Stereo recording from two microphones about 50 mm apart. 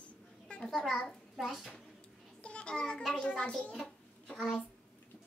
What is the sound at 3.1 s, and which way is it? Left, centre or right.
Speech, centre.